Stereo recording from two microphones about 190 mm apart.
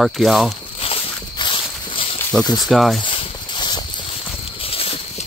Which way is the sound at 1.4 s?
25° left (ahead or behind).